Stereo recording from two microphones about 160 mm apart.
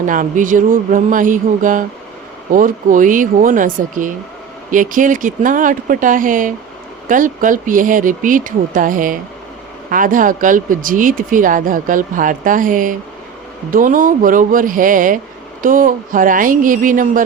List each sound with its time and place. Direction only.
0.0 s speech: 55° right (ahead or behind)